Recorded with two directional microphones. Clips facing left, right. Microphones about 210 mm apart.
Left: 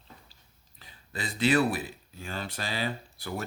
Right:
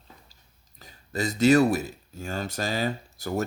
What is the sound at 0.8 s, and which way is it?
Speech, 45° right (ahead or behind).